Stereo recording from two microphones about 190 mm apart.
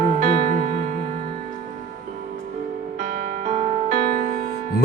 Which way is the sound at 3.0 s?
40° right (ahead or behind).